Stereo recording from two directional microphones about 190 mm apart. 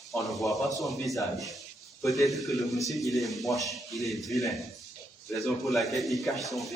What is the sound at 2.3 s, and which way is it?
A man's voice, centre (ahead or behind).